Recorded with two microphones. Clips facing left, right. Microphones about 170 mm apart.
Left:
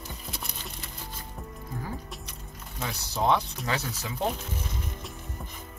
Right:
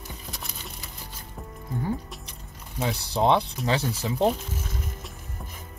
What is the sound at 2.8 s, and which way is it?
Speech, 30° right (ahead or behind).